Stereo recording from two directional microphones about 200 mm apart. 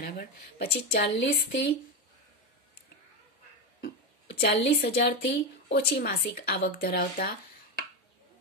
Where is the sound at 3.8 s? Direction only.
55° left (ahead or behind).